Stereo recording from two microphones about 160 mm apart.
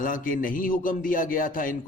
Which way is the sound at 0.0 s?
55° left (ahead or behind).